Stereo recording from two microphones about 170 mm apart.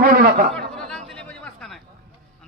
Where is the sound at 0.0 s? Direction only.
60° right (ahead or behind).